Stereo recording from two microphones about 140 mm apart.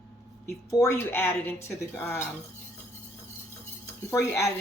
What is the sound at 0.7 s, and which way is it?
Speech, 20° left (ahead or behind).